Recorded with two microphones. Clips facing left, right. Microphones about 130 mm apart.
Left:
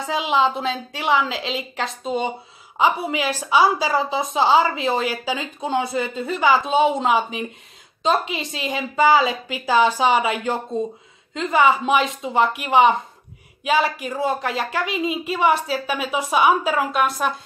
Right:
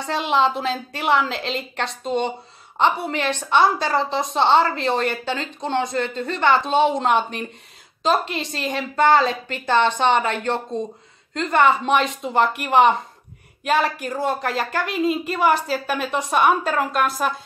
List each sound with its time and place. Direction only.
0.0 s a woman's voice: centre (ahead or behind)